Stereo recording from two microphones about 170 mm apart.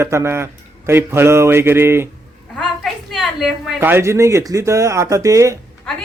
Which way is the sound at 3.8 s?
15° right (ahead or behind).